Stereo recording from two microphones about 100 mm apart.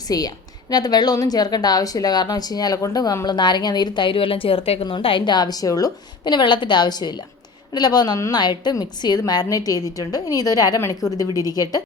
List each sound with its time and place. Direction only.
0.1 s a woman's voice: 40° left (ahead or behind); by 4.9 s 70° left (ahead or behind)
4.9 s a woman's voice: 55° left (ahead or behind); by 11.8 s 40° left (ahead or behind)